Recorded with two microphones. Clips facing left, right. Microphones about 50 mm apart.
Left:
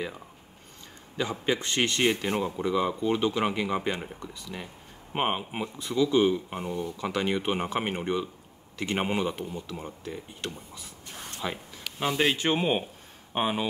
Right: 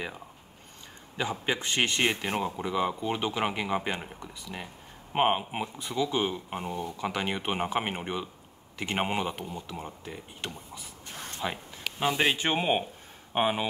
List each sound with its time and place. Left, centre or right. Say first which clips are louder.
1.4 s speech: left 2 dB; centre